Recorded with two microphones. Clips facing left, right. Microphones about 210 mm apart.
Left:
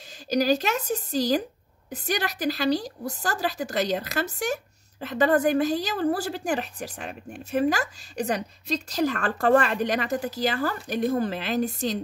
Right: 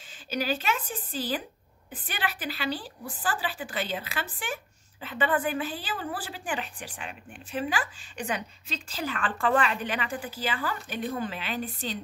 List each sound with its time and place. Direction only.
0.3 s a woman's voice: 40° left (ahead or behind)